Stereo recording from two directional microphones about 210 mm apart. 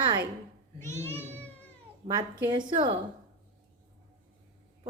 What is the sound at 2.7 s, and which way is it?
Speech, 20° right (ahead or behind).